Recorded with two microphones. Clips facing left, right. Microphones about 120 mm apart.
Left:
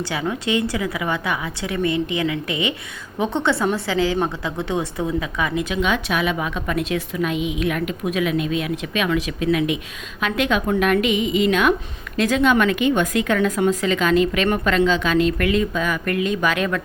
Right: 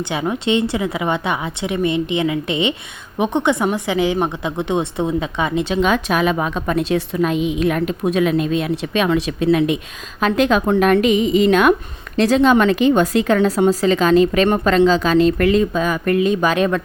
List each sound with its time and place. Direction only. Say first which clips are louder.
0.0 s a woman's voice: right 3 dB; 25° right (ahead or behind)